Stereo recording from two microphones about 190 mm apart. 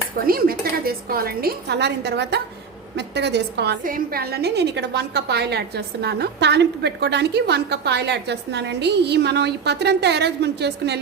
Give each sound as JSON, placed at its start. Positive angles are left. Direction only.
{"t": 0.3, "sound": "a woman's voice", "side_deg": -50}